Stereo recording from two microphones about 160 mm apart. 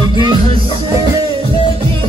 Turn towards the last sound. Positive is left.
turn(degrees=-25)  # may be behind; listen again after turning